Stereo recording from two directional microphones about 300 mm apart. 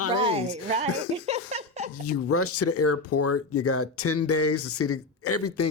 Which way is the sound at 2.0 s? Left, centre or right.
Left.